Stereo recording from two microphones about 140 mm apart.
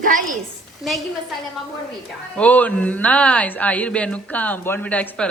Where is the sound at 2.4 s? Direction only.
10° left (ahead or behind).